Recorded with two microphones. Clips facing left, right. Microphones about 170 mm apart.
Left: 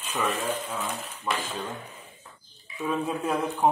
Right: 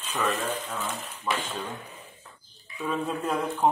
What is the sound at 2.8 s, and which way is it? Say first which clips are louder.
Speech: left 1 dB; 10° left (ahead or behind).